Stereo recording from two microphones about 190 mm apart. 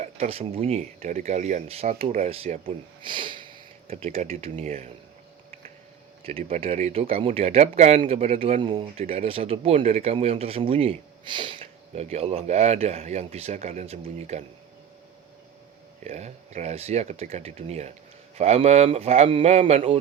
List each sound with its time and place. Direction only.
0.0 s speech: 35° right (ahead or behind)
3.9 s speech: 35° right (ahead or behind)
6.2 s speech: 30° right (ahead or behind)
16.0 s speech: 35° right (ahead or behind)